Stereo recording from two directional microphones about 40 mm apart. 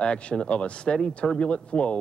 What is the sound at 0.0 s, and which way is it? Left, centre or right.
Speech, left.